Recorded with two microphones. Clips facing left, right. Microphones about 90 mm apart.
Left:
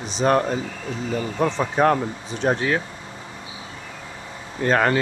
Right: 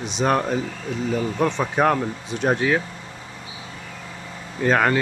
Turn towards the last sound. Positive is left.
turn(degrees=0)  # may be behind; listen again after turning